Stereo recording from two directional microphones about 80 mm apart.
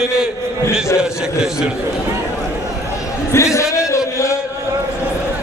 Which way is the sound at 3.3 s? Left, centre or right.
Left.